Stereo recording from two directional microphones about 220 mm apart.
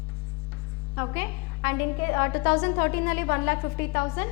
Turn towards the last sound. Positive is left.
turn(degrees=15)  # may be behind; listen again after turning